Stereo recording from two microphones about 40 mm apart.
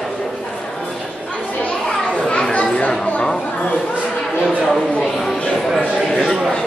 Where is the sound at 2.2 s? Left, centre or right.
Left.